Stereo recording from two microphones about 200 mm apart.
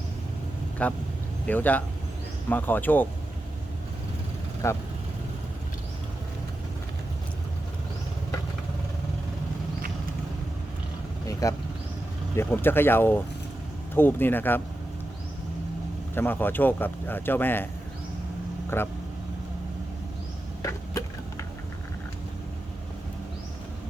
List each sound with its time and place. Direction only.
0.8 s speech: 5° left (ahead or behind)
4.6 s speech: 15° left (ahead or behind)
11.3 s vehicle: 15° left (ahead or behind)
12.4 s speech: 10° left (ahead or behind)
16.1 s speech: 10° left (ahead or behind)
18.7 s speech: 10° left (ahead or behind)
20.6 s a sound: 15° left (ahead or behind)